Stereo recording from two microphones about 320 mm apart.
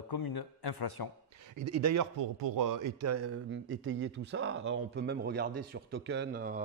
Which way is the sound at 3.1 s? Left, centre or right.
Right.